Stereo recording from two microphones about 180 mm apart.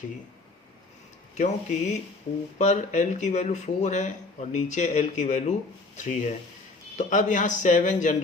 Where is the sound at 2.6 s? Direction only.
40° left (ahead or behind).